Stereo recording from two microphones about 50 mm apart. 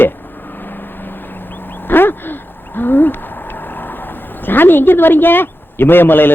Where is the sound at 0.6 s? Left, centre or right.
Left.